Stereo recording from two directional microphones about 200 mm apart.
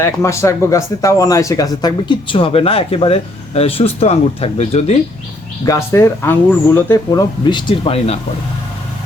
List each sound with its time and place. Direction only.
0.2 s speech: 15° left (ahead or behind); by 4.9 s 30° left (ahead or behind)
5.6 s speech: 15° left (ahead or behind); by 8.2 s 30° left (ahead or behind)